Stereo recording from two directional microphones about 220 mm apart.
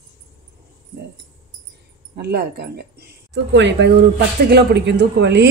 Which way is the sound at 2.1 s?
45° right (ahead or behind).